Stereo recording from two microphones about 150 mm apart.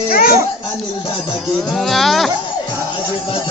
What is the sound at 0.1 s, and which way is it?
Children playing, 80° left.